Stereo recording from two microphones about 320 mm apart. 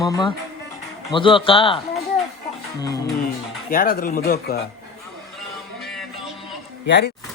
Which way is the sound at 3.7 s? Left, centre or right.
Left.